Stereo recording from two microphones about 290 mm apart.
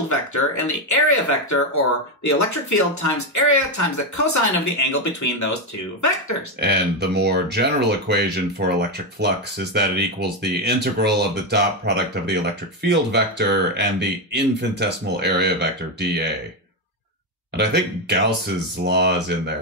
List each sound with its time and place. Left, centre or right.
0.1 s speech: left
6.6 s speech: right
17.6 s speech: right